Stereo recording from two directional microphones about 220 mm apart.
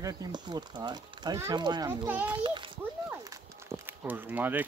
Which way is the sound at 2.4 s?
20° right (ahead or behind).